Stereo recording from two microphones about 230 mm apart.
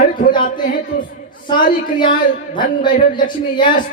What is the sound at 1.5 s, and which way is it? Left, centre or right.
Speech, centre.